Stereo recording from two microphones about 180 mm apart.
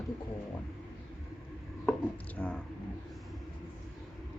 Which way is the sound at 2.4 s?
10° left (ahead or behind).